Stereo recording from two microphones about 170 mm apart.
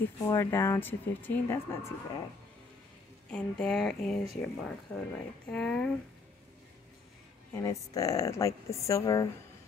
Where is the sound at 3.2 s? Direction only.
5° left (ahead or behind).